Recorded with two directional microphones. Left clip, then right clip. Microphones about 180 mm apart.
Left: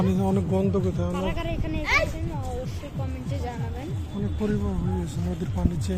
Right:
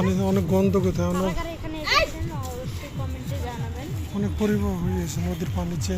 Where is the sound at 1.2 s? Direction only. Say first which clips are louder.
Right 2 dB; 40° left (ahead or behind).